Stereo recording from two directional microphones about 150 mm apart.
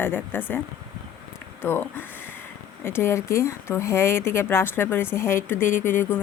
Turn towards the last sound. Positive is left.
turn(degrees=15)  # may be behind; listen again after turning